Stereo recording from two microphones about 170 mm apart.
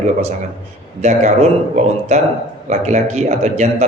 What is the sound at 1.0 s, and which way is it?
A man's voice, 45° right (ahead or behind).